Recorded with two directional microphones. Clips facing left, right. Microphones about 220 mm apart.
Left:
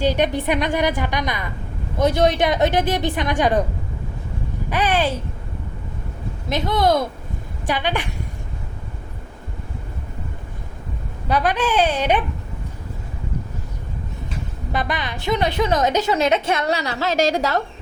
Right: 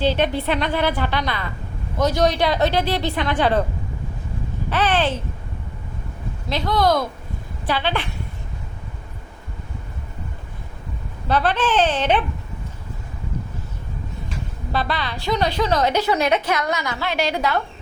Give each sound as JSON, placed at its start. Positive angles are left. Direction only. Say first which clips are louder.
{"t": 0.0, "sound": "a woman's voice", "louder": "left 1 dB", "side_deg": 15}
{"t": 4.7, "sound": "a woman's voice", "louder": "even", "side_deg": 10}
{"t": 6.5, "sound": "a woman's voice", "louder": "left 1 dB", "side_deg": 20}
{"t": 11.3, "sound": "a woman's voice", "louder": "even", "side_deg": 10}
{"t": 14.7, "sound": "a woman's voice", "louder": "even", "side_deg": 15}